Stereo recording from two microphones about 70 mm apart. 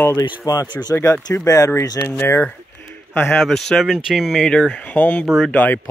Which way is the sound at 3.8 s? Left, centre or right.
Centre.